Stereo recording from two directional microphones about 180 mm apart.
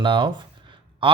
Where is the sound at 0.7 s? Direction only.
25° right (ahead or behind).